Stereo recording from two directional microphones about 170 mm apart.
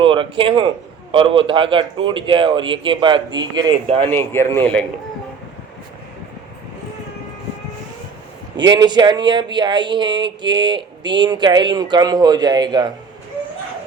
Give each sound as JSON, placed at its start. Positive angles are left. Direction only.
{"t": 0.0, "sound": "speech", "side_deg": -30}
{"t": 3.8, "sound": "speech", "side_deg": -35}
{"t": 4.2, "sound": "speech", "side_deg": 15}
{"t": 8.5, "sound": "speech", "side_deg": -25}